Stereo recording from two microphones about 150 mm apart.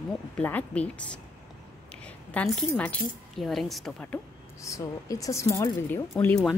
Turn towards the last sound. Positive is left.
turn(degrees=15)  # may be behind; listen again after turning